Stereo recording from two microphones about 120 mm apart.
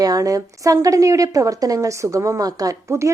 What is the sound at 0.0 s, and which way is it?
A woman's voice, 30° right (ahead or behind).